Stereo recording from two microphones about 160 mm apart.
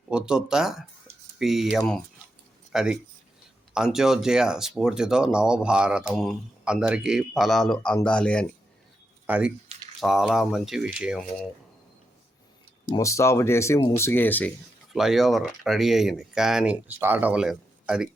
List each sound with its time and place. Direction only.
0.1 s speech: 5° right (ahead or behind)
2.7 s speech: 5° right (ahead or behind)
9.2 s speech: 10° right (ahead or behind)
12.9 s speech: 20° left (ahead or behind)
14.9 s speech: centre (ahead or behind)